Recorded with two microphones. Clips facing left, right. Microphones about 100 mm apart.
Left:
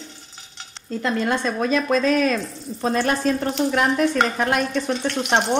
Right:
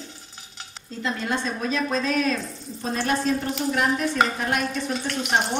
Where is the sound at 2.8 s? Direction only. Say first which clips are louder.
Left 4 dB; 90° left.